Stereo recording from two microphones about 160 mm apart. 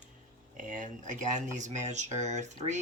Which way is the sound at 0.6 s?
55° right (ahead or behind).